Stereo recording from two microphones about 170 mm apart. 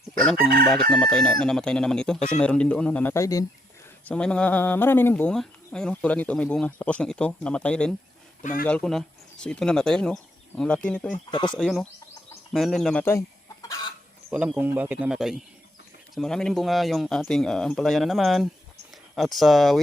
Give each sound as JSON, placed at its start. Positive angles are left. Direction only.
{"t": 0.9, "sound": "speech", "side_deg": 5}
{"t": 4.0, "sound": "speech", "side_deg": 5}
{"t": 8.4, "sound": "speech", "side_deg": 50}
{"t": 8.6, "sound": "speech", "side_deg": 5}
{"t": 11.3, "sound": "speech", "side_deg": 25}
{"t": 11.5, "sound": "speech", "side_deg": 5}
{"t": 12.5, "sound": "chicken", "side_deg": 0}
{"t": 14.3, "sound": "speech", "side_deg": -10}